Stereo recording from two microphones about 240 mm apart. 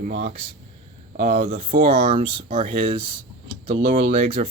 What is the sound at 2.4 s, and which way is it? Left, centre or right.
Speech, right.